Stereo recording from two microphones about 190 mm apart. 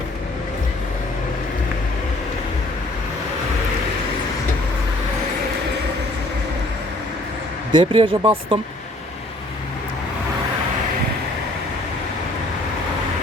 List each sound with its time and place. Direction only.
7.7 s speech: 25° right (ahead or behind)